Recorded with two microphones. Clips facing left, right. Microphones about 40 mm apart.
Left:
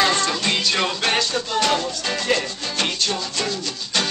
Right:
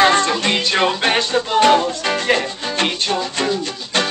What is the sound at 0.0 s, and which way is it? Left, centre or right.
Music, right.